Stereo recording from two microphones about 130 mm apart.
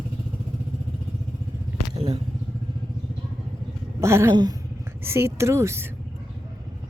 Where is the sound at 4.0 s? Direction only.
20° right (ahead or behind).